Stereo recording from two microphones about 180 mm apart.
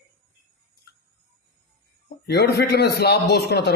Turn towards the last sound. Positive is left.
turn(degrees=65)  # may be behind; listen again after turning